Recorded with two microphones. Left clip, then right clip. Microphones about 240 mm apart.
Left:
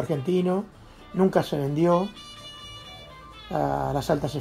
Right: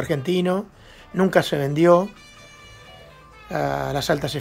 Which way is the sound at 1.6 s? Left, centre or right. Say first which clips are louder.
Right 7 dB; right.